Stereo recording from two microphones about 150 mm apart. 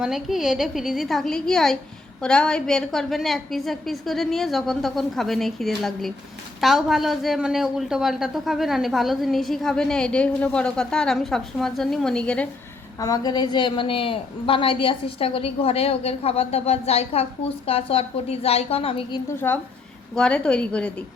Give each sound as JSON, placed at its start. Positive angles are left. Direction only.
{"t": 0.0, "sound": "a woman's voice", "side_deg": 0}
{"t": 13.0, "sound": "a woman's voice", "side_deg": 25}
{"t": 19.4, "sound": "a woman's voice", "side_deg": 15}